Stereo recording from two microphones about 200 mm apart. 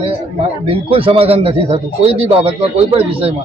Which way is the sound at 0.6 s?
25° right (ahead or behind).